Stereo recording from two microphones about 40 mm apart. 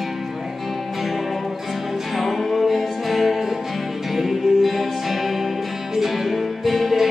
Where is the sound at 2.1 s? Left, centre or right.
Centre.